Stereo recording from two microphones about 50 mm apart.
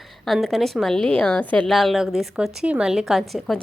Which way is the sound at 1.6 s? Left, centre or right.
Centre.